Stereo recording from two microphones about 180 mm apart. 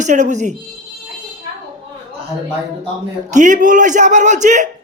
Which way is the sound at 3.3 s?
45° right (ahead or behind).